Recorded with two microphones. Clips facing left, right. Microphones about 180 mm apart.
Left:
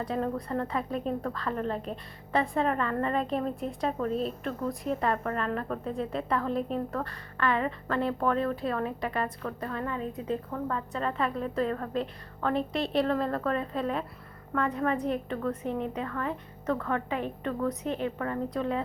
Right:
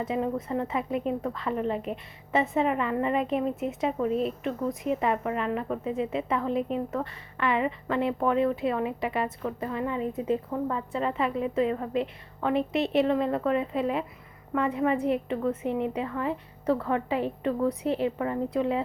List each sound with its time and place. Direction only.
0.5 s a woman's voice: 10° right (ahead or behind)
2.3 s a woman's voice: 20° right (ahead or behind)
2.6 s a woman's voice: 10° right (ahead or behind)
7.3 s a woman's voice: 20° right (ahead or behind)
14.9 s a woman's voice: 25° right (ahead or behind)